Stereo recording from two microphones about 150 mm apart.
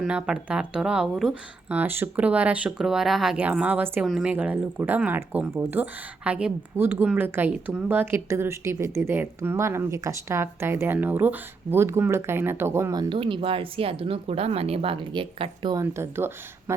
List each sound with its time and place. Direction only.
0.0 s speech: 5° right (ahead or behind); by 15.7 s 35° right (ahead or behind)
15.7 s speech: 20° right (ahead or behind)